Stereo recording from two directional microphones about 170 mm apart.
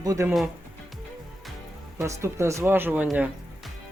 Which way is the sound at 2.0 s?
15° right (ahead or behind).